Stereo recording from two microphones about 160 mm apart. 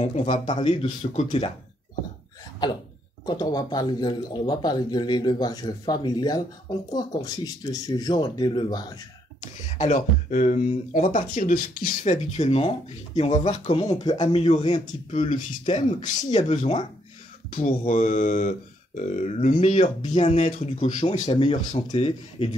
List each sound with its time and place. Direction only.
0.0 s speech: 45° left (ahead or behind)
0.5 s speech: 30° left (ahead or behind)
2.6 s speech: 25° left (ahead or behind)
9.4 s speech: 50° left (ahead or behind)
12.0 s speech: 45° left (ahead or behind)
13.8 s speech: 25° left (ahead or behind)
14.7 s speech: 45° left (ahead or behind)
21.3 s speech: 35° left (ahead or behind)